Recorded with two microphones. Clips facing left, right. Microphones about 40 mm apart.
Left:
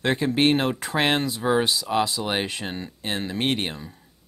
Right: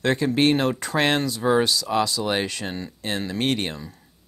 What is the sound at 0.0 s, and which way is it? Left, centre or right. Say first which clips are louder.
Speech: right 1 dB; centre.